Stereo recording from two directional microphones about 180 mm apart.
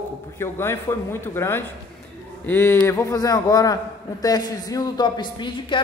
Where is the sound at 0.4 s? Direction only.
15° left (ahead or behind).